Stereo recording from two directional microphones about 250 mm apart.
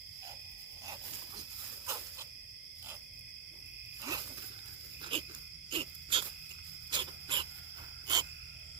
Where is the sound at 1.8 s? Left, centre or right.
Centre.